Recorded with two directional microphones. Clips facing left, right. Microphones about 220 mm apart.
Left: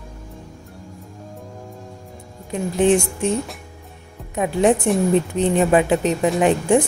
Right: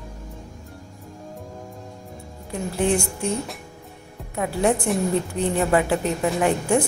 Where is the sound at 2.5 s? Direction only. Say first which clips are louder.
Left 6 dB; 15° left (ahead or behind).